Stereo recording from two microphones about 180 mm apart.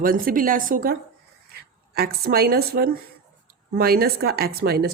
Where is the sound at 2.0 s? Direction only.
60° right (ahead or behind).